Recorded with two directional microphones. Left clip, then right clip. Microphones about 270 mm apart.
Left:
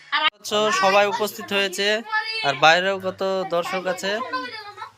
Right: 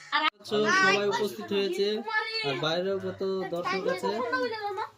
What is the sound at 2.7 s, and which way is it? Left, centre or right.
Speech, left.